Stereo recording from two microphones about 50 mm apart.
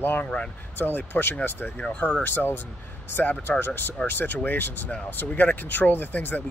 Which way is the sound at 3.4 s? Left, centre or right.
Left.